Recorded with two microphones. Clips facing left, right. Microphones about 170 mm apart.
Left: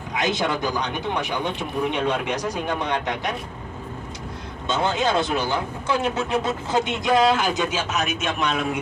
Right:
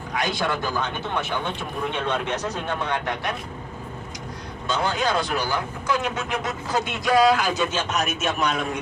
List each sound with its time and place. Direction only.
0.1 s speech: 20° left (ahead or behind)
4.7 s speech: 25° left (ahead or behind); by 8.8 s centre (ahead or behind)